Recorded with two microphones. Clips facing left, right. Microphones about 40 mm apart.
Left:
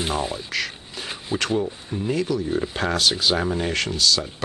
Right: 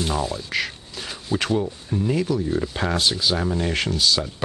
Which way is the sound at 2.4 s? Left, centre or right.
Centre.